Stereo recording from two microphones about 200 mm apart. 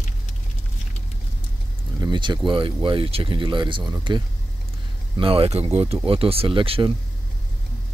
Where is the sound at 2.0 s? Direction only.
25° right (ahead or behind).